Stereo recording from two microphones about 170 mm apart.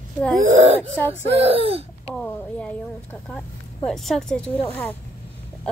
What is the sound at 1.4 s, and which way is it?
Speech, 35° right (ahead or behind).